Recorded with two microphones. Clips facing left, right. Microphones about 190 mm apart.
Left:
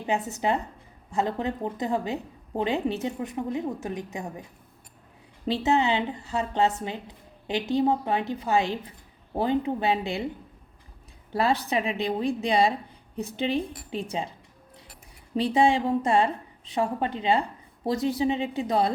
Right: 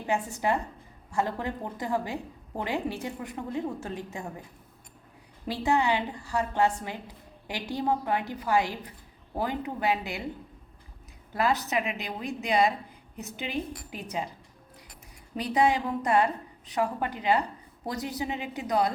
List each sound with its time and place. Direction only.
0.0 s a woman's voice: 20° left (ahead or behind)
5.5 s a woman's voice: 20° left (ahead or behind)
11.3 s a woman's voice: 30° left (ahead or behind)
15.4 s a woman's voice: 25° left (ahead or behind)